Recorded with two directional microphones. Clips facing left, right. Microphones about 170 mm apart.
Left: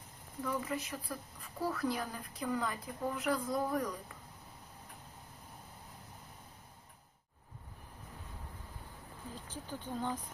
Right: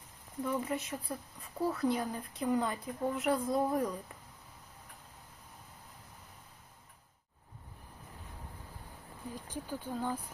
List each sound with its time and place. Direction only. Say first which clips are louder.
0.4 s a woman's voice: right 2 dB; 25° right (ahead or behind)
9.3 s speech: right 4 dB; 10° right (ahead or behind)